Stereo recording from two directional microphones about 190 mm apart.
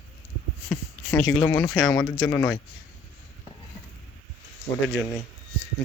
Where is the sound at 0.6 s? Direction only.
15° left (ahead or behind).